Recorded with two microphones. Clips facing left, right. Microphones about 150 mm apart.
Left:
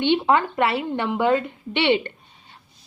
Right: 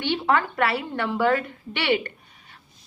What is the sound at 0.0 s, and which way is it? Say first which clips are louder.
A woman's voice: left 4 dB; 20° left (ahead or behind).